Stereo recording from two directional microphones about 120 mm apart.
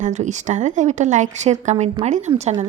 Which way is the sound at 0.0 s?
85° right.